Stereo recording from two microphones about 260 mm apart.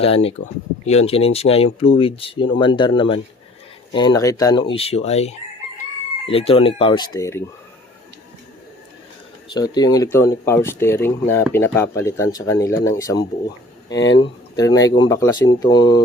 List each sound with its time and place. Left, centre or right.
0.0 s speech: left
3.9 s chicken: centre
6.2 s speech: left
9.5 s speech: centre